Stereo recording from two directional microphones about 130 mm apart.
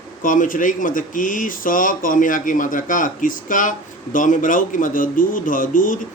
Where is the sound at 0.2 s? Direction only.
90° left.